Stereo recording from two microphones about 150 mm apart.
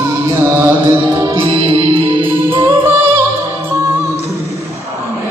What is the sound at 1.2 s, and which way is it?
Music, 30° right (ahead or behind).